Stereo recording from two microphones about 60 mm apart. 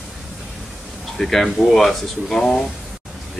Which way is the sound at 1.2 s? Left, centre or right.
Centre.